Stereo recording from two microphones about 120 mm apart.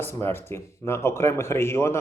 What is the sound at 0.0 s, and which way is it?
Speech, 20° left (ahead or behind).